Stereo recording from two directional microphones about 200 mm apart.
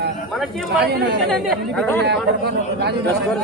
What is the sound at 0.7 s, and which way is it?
Speech, 55° right (ahead or behind).